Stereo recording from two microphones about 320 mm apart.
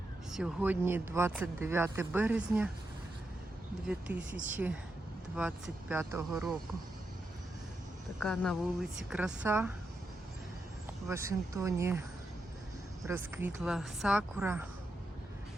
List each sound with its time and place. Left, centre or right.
0.3 s speech: centre
3.8 s speech: centre
4.4 s a woman's voice: right
5.4 s speech: centre
8.2 s speech: centre
11.1 s speech: centre
13.1 s speech: centre